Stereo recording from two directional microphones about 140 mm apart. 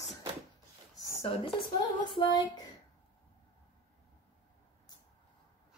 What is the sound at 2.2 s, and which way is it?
Speech, 30° left (ahead or behind).